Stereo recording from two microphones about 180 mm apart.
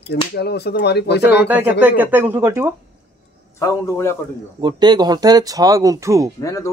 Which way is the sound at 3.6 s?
15° left (ahead or behind).